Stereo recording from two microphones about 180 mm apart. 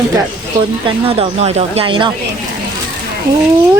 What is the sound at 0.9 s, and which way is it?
Speech, 30° right (ahead or behind).